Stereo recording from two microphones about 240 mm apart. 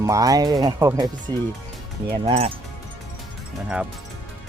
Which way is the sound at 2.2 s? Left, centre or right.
Right.